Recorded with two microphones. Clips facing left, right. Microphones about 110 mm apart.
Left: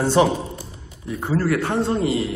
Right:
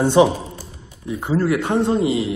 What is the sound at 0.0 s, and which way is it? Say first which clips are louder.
A man's voice: right 3 dB; 20° right (ahead or behind).